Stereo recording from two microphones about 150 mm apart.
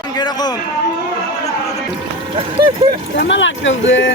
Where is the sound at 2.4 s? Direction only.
40° right (ahead or behind).